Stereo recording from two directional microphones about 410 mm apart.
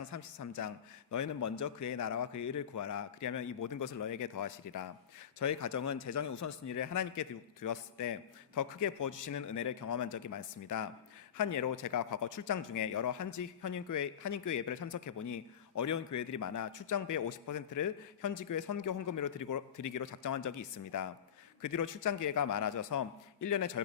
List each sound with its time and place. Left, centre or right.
0.0 s a man's voice: left